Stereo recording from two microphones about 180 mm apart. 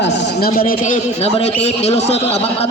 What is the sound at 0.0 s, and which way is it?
Speech, 75° left (ahead or behind).